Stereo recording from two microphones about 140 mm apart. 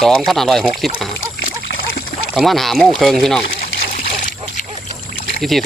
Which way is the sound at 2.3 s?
Centre (ahead or behind).